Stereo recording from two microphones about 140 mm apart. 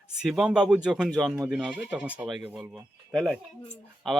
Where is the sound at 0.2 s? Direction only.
5° right (ahead or behind).